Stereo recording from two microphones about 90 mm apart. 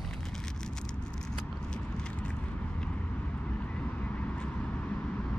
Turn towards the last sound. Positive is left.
turn(degrees=15)  # may be behind; listen again after turning